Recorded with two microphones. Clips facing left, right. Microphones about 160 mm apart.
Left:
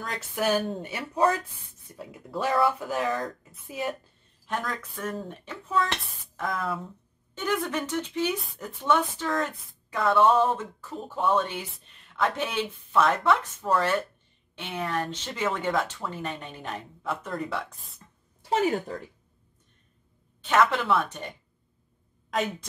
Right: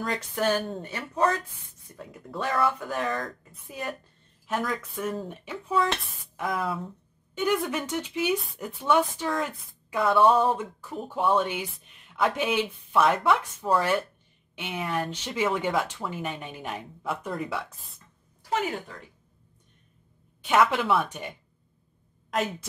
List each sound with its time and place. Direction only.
0.0 s speech: 5° left (ahead or behind)
18.4 s speech: 35° left (ahead or behind)
20.4 s speech: 10° right (ahead or behind)
22.3 s speech: centre (ahead or behind)